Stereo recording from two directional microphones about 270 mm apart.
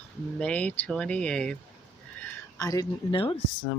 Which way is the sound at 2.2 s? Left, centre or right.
Centre.